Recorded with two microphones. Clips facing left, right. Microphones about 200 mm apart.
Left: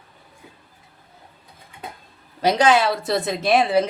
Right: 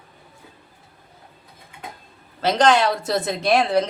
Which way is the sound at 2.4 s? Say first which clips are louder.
Even; 10° left (ahead or behind).